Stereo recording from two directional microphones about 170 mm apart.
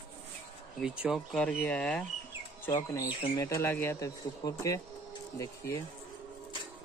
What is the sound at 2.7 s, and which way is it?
Speech, 15° left (ahead or behind).